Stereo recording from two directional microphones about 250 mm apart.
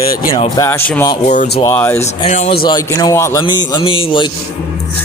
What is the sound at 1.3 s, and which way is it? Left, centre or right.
Speech, left.